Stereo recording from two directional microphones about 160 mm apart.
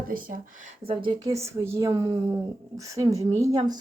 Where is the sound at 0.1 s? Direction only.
60° right (ahead or behind).